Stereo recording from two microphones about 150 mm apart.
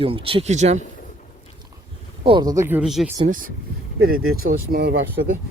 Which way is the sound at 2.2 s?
30° right (ahead or behind).